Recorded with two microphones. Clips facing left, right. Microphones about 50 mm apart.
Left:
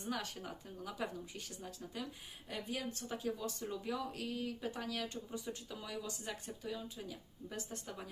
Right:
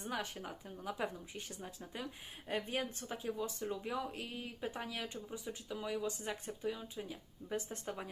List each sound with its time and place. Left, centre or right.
0.1 s speech: centre
2.5 s speech: right